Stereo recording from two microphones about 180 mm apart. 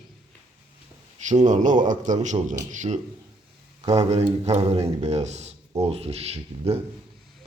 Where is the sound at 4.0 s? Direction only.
35° right (ahead or behind).